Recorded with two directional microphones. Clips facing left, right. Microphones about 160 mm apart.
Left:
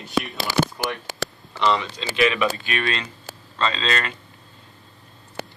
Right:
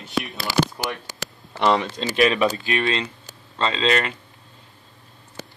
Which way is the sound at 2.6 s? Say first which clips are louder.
Right 3 dB; 25° right (ahead or behind).